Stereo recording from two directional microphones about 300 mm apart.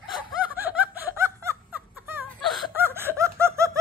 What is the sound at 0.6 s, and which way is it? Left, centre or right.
Laughter, centre.